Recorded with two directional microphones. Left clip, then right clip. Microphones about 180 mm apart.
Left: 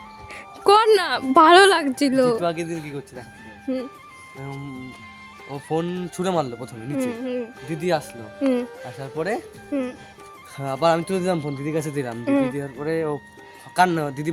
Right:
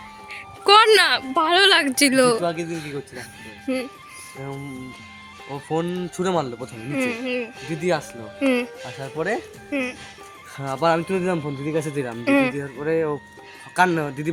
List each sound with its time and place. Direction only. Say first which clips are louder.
0.6 s music: right 2 dB; 20° left (ahead or behind)
1.3 s speech: left 10 dB; 45° left (ahead or behind)
2.0 s speech: right 2 dB; 15° left (ahead or behind)
5.7 s speech: even; 25° left (ahead or behind)
11.3 s speech: even; centre (ahead or behind)
11.6 s speech: right 1 dB; 25° left (ahead or behind)
12.2 s speech: right 3 dB; 10° left (ahead or behind)
12.8 s speech: right 3 dB; 25° left (ahead or behind)